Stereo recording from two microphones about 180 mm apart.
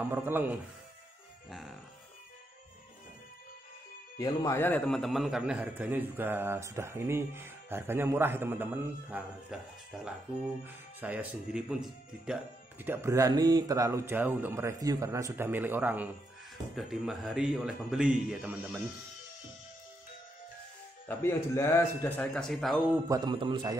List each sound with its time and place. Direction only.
0.0 s speech: 10° right (ahead or behind)
1.5 s speech: centre (ahead or behind)
4.2 s speech: 20° left (ahead or behind); by 9.6 s 10° right (ahead or behind)
10.6 s speech: 10° right (ahead or behind)
21.1 s speech: 15° left (ahead or behind)
22.8 s a man's voice: 20° right (ahead or behind)